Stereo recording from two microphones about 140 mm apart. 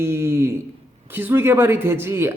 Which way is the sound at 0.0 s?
20° right (ahead or behind).